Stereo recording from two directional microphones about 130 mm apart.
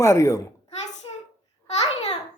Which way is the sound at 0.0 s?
20° left (ahead or behind).